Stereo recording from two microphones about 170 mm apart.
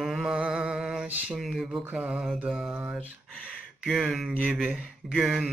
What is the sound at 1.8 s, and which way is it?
Mantra, 5° right (ahead or behind).